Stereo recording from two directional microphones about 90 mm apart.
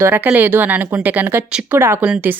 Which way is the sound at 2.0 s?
15° right (ahead or behind).